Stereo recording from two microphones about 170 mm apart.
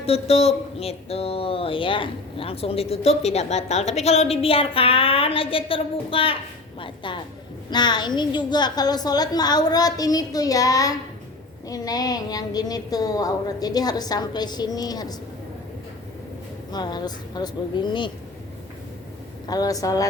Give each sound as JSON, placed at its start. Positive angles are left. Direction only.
{"t": 0.0, "sound": "speech", "side_deg": 35}
{"t": 16.7, "sound": "speech", "side_deg": 25}
{"t": 19.5, "sound": "speech", "side_deg": 20}